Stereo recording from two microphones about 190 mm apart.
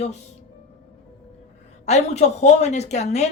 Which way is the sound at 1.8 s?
35° left (ahead or behind).